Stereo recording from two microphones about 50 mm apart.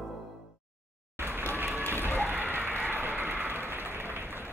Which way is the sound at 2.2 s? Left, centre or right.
Right.